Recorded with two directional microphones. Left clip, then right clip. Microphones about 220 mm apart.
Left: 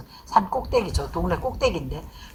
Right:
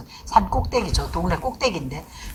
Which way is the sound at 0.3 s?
25° right (ahead or behind).